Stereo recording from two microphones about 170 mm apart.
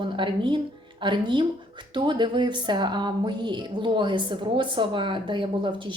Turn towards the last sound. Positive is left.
turn(degrees=-30)  # may be behind; listen again after turning